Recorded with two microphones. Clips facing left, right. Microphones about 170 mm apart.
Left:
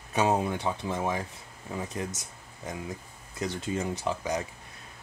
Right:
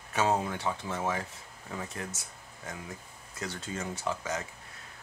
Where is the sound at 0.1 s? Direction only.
15° left (ahead or behind).